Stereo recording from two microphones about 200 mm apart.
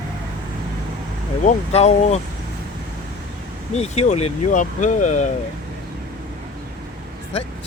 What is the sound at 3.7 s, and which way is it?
Speech, 35° left (ahead or behind).